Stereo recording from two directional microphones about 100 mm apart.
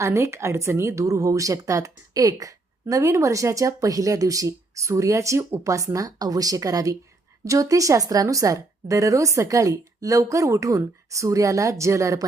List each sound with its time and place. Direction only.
0.0 s a woman's voice: 30° right (ahead or behind)